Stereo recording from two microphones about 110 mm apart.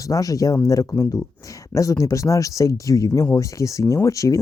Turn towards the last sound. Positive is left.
turn(degrees=30)  # may be behind; listen again after turning